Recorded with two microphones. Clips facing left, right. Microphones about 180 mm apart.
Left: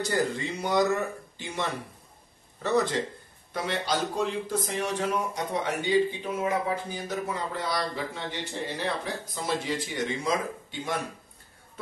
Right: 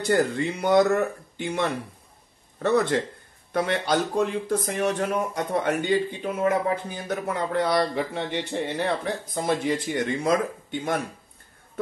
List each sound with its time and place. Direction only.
0.1 s speech: 60° right (ahead or behind)